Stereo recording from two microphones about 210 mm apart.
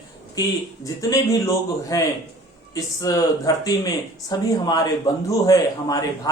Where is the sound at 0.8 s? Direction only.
15° left (ahead or behind).